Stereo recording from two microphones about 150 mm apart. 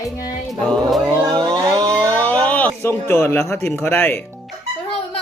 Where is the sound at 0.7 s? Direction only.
5° left (ahead or behind).